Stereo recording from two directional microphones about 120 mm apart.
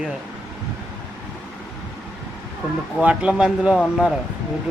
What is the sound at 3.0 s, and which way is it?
Speech, 10° right (ahead or behind).